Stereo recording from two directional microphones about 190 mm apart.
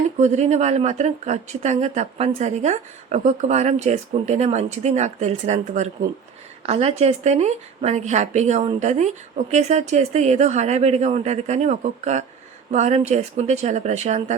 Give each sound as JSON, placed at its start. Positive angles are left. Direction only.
{"t": 0.2, "sound": "speech", "side_deg": -35}